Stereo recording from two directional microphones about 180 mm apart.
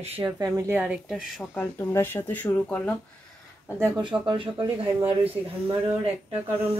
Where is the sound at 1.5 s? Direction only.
15° left (ahead or behind).